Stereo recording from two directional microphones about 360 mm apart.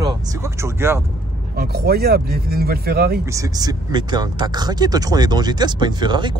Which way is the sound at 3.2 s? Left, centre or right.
Centre.